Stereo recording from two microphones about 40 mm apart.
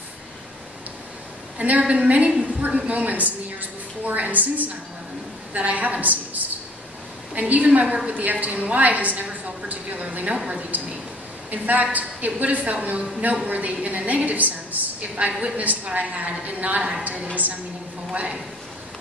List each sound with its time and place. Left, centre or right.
1.6 s a woman's voice: right
18.1 s a woman's voice: right